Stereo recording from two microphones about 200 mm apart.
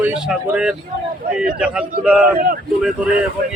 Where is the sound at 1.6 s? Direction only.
5° right (ahead or behind).